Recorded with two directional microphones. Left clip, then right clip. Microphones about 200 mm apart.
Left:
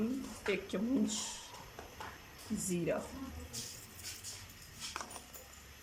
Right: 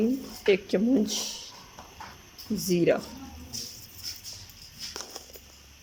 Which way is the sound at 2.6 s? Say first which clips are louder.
Right 13 dB; 45° right (ahead or behind).